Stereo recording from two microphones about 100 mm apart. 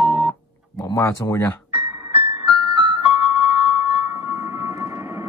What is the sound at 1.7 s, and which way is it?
Music, 70° left (ahead or behind).